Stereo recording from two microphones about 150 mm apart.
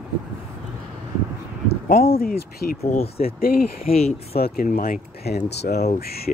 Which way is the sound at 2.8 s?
45° left (ahead or behind).